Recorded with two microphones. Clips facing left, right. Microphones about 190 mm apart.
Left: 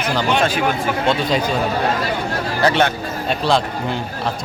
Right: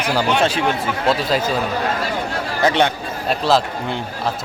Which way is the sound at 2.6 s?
20° right (ahead or behind).